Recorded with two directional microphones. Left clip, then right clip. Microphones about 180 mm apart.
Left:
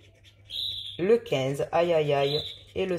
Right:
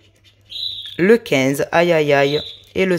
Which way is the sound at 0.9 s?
45° right (ahead or behind).